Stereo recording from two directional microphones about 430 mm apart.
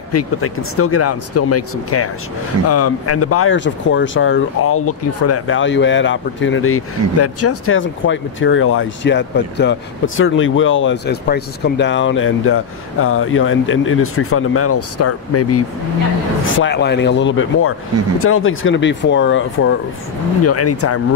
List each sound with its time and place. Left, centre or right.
0.1 s speech: left